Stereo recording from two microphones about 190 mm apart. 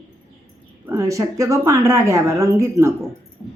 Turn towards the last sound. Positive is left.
turn(degrees=-15)  # may be behind; listen again after turning